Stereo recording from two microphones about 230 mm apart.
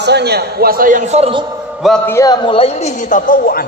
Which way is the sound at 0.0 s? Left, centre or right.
Right.